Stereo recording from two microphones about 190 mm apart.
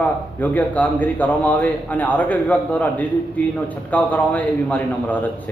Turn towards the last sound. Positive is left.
turn(degrees=10)  # may be behind; listen again after turning